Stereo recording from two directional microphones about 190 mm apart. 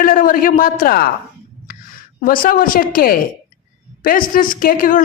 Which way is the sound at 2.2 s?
50° left (ahead or behind).